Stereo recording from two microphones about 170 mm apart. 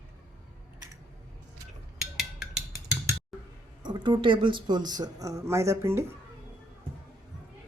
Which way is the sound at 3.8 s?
25° right (ahead or behind).